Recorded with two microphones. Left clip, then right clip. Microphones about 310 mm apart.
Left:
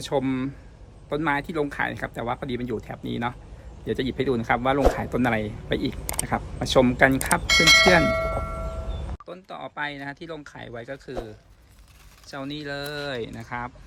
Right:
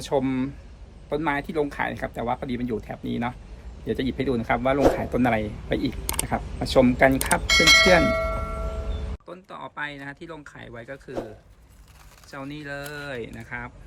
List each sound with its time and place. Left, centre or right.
0.0 s speech: centre
12.3 s speech: centre